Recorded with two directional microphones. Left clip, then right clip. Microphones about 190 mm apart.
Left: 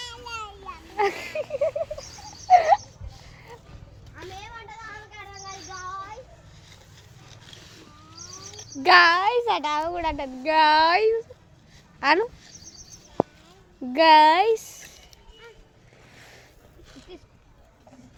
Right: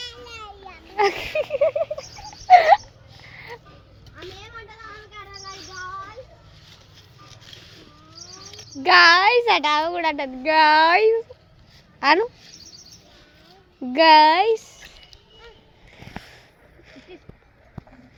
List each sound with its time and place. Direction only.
0.0 s children playing: 10° left (ahead or behind)
0.9 s a sound: 20° right (ahead or behind)
3.3 s music: 25° right (ahead or behind)
7.3 s a sound: 20° right (ahead or behind)
8.4 s child singing: 25° right (ahead or behind)
8.8 s a child's voice: centre (ahead or behind)
9.0 s a child's voice: 20° right (ahead or behind)
13.8 s speech: 10° right (ahead or behind)